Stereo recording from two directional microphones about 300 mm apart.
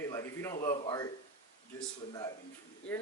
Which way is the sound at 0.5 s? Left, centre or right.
Left.